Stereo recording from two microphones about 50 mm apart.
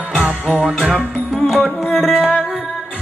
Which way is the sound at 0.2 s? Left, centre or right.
Right.